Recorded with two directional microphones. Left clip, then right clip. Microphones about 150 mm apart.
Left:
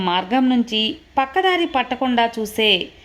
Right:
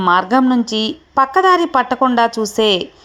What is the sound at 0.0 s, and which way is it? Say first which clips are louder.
A woman's voice: right 6 dB; 20° right (ahead or behind).